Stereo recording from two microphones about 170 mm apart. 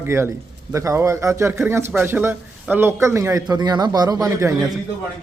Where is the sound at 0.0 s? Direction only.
15° right (ahead or behind).